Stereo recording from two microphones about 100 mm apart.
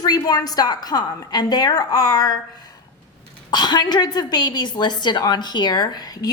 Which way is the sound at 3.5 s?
45° left (ahead or behind).